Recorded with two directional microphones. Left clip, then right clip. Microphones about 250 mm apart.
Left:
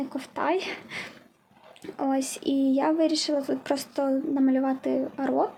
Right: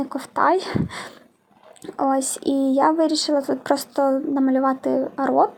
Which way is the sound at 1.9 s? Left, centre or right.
Centre.